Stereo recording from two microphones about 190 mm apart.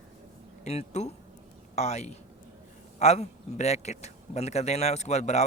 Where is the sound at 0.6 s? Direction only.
35° left (ahead or behind).